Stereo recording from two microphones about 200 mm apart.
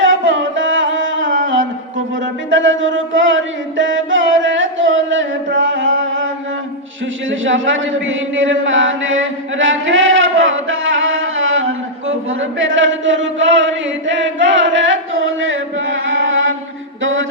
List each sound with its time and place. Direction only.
0.0 s music: 70° right (ahead or behind)
2.5 s chant: 70° right (ahead or behind)
7.3 s a sound: 70° right (ahead or behind)
17.0 s mantra: 75° right (ahead or behind)